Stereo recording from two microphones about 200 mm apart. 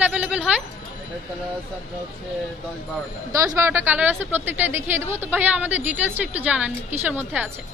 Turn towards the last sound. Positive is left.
turn(degrees=-10)  # may be behind; listen again after turning